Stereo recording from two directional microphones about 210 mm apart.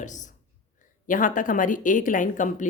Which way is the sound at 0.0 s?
35° left (ahead or behind).